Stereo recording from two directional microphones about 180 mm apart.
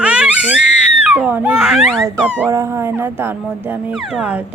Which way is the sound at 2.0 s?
15° right (ahead or behind).